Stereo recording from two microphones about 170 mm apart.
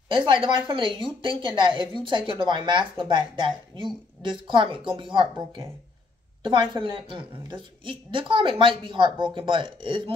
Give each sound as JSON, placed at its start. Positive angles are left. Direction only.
{"t": 0.1, "sound": "speech", "side_deg": -30}
{"t": 6.4, "sound": "speech", "side_deg": -30}